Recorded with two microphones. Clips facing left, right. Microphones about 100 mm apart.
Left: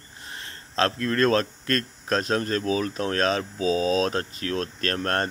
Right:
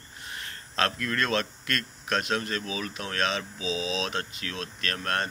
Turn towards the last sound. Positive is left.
turn(degrees=40)  # may be behind; listen again after turning